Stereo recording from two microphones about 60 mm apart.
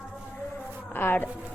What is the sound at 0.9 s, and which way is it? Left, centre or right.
Speech, left.